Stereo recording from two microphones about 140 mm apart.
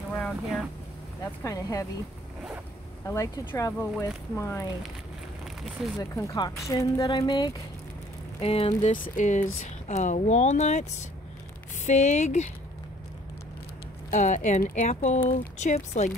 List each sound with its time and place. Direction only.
0.1 s boat: centre (ahead or behind)
1.4 s speech: 25° left (ahead or behind)
3.1 s speech: 20° left (ahead or behind)
5.6 s speech: centre (ahead or behind)
5.9 s speech: 20° left (ahead or behind)
8.4 s speech: 45° left (ahead or behind)
8.9 s speech: 70° left (ahead or behind)
14.1 s speech: 60° left (ahead or behind); by 14.8 s 75° left (ahead or behind)
14.8 s speech: 55° left (ahead or behind)